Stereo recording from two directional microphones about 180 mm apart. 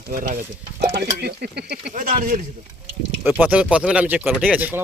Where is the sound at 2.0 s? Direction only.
45° right (ahead or behind).